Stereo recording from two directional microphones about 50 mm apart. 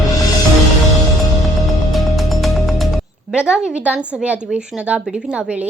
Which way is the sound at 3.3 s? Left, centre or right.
Centre.